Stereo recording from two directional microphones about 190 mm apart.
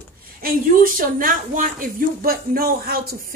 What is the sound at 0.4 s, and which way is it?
A woman's voice, 50° right (ahead or behind).